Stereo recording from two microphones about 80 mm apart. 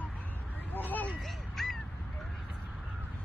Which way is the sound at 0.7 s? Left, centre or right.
Left.